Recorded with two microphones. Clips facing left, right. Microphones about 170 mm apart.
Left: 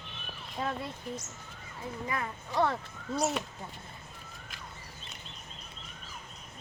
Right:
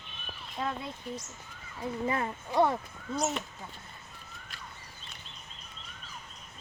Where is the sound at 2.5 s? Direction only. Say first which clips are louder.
Right 3 dB; 15° right (ahead or behind).